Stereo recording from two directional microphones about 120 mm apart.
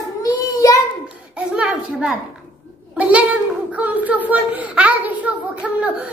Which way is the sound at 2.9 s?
10° right (ahead or behind).